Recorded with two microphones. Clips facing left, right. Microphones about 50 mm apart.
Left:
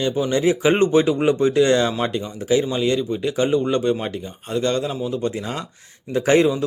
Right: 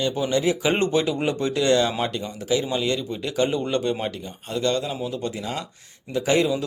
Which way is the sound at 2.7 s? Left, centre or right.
Centre.